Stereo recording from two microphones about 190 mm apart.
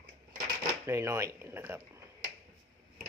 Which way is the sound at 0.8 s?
15° right (ahead or behind).